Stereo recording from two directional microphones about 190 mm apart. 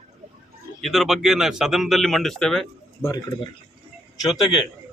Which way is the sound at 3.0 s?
20° left (ahead or behind).